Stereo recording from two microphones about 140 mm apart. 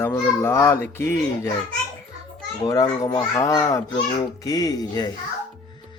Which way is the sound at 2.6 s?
30° left (ahead or behind).